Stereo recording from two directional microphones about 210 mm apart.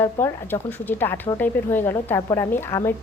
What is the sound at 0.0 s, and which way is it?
A woman's voice, 10° left (ahead or behind).